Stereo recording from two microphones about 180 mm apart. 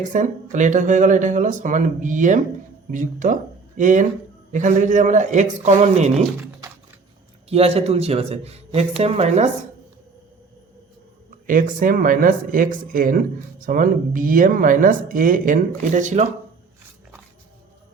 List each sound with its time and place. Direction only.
0.0 s speech: 45° right (ahead or behind)
7.5 s a man's voice: 35° right (ahead or behind)
11.4 s speech: 50° right (ahead or behind)